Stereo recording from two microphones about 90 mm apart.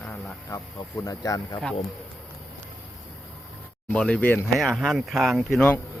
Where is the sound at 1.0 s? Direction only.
40° left (ahead or behind).